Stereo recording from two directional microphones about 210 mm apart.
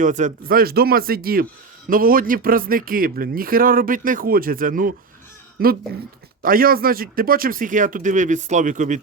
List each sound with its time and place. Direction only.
0.0 s speech: 35° right (ahead or behind)